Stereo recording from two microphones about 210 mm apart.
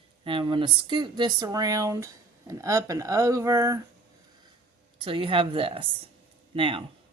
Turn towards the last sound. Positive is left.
turn(degrees=-25)  # may be behind; listen again after turning